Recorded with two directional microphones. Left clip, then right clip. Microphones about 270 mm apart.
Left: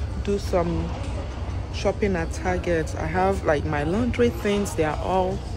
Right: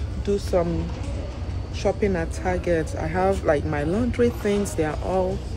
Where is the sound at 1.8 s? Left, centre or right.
Centre.